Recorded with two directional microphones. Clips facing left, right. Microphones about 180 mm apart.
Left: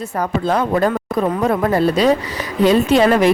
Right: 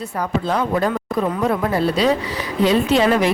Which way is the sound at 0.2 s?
45° left (ahead or behind).